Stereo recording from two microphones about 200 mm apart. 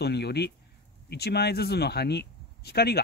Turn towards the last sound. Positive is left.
turn(degrees=50)  # may be behind; listen again after turning